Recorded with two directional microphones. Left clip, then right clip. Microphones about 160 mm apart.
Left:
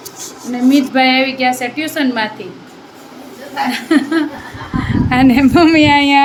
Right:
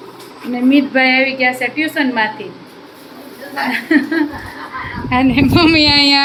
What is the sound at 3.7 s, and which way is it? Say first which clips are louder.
Child singing: even; 20° left (ahead or behind).